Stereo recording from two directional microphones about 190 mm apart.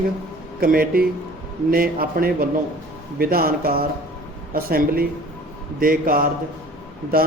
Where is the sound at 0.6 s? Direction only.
50° right (ahead or behind).